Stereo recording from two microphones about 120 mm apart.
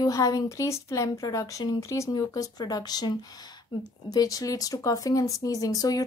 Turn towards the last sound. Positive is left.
turn(degrees=30)  # may be behind; listen again after turning